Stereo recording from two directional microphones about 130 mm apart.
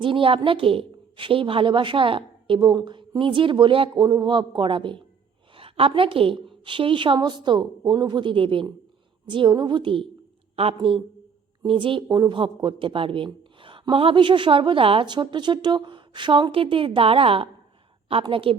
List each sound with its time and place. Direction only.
0.0 s a woman's voice: 45° right (ahead or behind)